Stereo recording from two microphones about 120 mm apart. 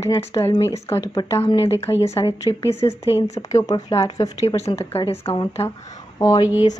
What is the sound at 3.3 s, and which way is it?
Speech, 30° left (ahead or behind).